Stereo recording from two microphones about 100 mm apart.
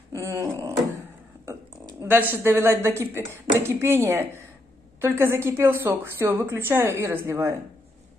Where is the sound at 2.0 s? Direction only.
20° right (ahead or behind).